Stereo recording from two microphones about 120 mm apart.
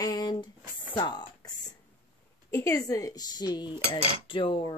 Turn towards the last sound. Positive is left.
turn(degrees=45)  # may be behind; listen again after turning